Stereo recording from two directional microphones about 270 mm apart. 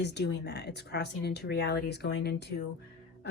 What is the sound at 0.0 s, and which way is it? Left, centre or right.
Speech, left.